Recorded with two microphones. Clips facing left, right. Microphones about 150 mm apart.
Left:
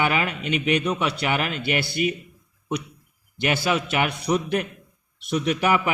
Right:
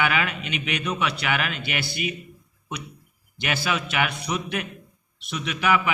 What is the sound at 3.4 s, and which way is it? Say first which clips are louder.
A man's voice: left 4 dB; 25° left (ahead or behind).